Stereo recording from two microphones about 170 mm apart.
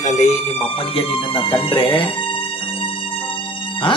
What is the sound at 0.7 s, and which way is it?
Speech, 30° left (ahead or behind).